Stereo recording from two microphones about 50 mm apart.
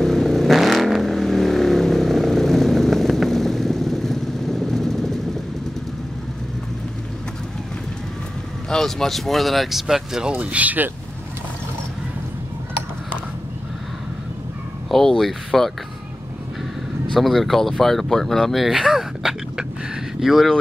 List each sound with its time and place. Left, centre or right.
0.0 s vehicle: centre
8.6 s speech: centre
10.4 s speech: right
14.9 s speech: centre
17.1 s speech: centre